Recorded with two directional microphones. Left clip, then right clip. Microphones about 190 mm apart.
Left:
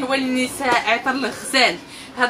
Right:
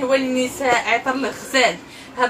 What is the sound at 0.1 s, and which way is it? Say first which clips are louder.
A woman's voice: right 1 dB; 20° left (ahead or behind).